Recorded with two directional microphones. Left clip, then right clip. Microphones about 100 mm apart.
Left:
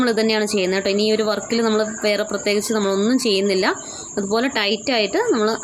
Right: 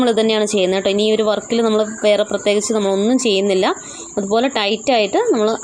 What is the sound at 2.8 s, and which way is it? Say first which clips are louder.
Speech: right 3 dB; 10° right (ahead or behind).